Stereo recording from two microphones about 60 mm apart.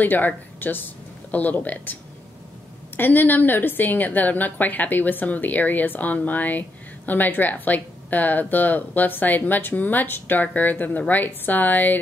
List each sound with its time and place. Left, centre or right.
0.0 s a woman's voice: left
3.0 s a woman's voice: left